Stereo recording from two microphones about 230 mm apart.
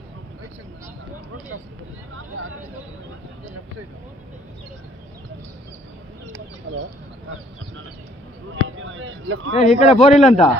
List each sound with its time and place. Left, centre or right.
6.7 s speech: right
8.6 s speech: right
9.5 s a man's voice: left